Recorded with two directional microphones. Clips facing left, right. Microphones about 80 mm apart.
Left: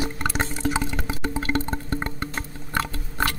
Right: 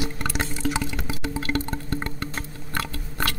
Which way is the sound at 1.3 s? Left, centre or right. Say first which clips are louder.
Left 1 dB; left.